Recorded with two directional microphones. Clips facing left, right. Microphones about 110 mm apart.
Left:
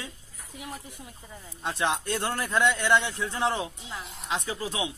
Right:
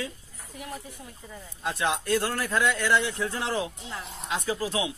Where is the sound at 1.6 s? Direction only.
25° left (ahead or behind).